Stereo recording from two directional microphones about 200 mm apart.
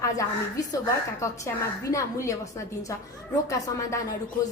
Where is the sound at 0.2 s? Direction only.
15° left (ahead or behind).